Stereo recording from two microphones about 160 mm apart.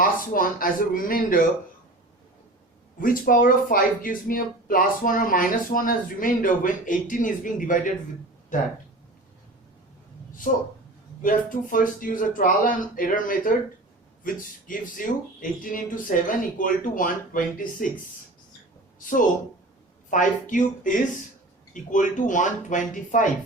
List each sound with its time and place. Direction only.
0.0 s speech: 60° left (ahead or behind)
3.0 s speech: 60° left (ahead or behind)
11.2 s speech: 60° left (ahead or behind)
18.9 s speech: 55° left (ahead or behind)